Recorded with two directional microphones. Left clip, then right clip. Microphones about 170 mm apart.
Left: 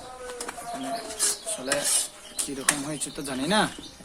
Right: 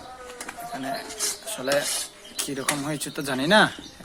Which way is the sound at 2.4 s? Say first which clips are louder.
Right 1 dB; 35° right (ahead or behind).